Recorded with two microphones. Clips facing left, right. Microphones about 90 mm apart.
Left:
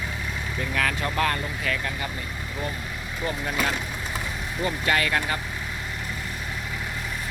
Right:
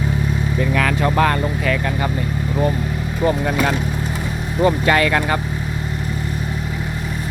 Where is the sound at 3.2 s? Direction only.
50° right (ahead or behind).